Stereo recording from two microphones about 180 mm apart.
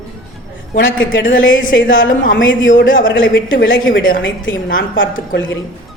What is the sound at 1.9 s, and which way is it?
Speech, 50° left (ahead or behind).